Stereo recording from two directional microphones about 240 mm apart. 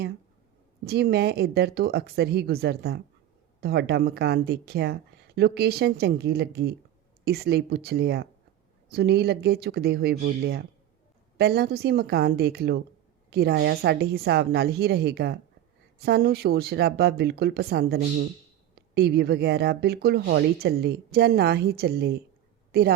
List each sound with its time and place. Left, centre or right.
0.9 s a woman's voice: right